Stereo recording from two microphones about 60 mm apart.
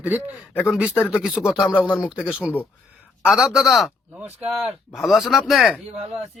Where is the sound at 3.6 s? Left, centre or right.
Centre.